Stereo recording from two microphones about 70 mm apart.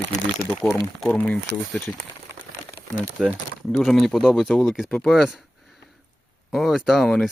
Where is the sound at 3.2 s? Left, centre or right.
Centre.